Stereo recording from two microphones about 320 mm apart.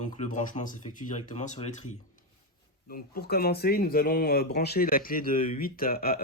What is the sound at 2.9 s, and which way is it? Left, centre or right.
Speech, left.